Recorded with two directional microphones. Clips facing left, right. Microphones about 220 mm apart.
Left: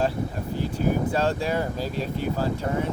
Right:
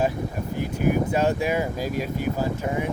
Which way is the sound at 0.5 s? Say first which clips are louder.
Right 2 dB; 15° right (ahead or behind).